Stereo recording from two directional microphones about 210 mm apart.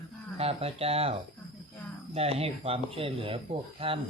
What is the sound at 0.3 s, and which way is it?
Speech, 30° right (ahead or behind).